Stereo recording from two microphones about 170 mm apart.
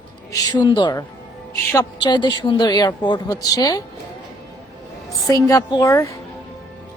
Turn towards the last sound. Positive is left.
turn(degrees=20)  # may be behind; listen again after turning